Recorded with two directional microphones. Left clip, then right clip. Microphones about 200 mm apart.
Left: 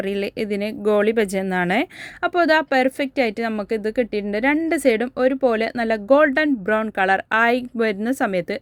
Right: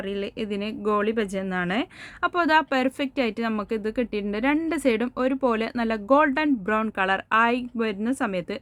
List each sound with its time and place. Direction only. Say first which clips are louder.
0.1 s speech: left 6 dB; 25° left (ahead or behind)